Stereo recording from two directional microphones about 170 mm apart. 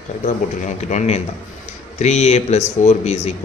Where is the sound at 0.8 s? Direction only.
40° left (ahead or behind).